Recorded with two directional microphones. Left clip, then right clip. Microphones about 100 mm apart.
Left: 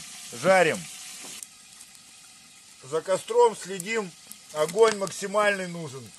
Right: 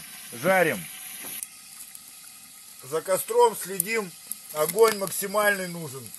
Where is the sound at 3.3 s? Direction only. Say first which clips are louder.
Even; 20° right (ahead or behind).